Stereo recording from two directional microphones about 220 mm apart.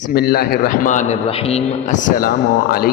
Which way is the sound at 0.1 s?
45° left (ahead or behind).